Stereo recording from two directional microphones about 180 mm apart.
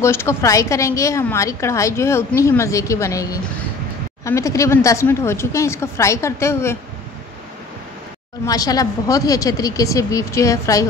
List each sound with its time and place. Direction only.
0.0 s a woman's voice: 15° left (ahead or behind)
8.5 s a woman's voice: 20° left (ahead or behind)